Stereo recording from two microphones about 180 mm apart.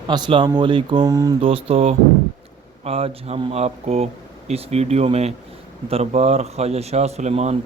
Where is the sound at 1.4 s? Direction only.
30° right (ahead or behind).